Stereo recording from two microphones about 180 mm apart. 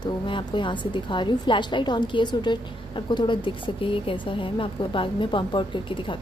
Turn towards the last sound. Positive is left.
turn(degrees=25)  # may be behind; listen again after turning